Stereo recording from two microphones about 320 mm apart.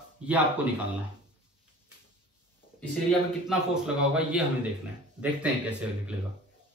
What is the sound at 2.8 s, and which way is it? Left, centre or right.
A man's voice, centre.